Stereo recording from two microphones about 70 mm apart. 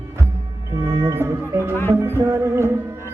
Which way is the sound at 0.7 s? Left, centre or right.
Right.